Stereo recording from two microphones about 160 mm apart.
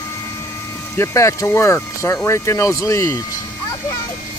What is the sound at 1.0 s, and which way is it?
Speech, 15° left (ahead or behind).